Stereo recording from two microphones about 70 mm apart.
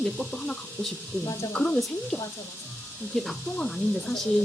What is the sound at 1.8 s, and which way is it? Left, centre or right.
A woman's voice, centre.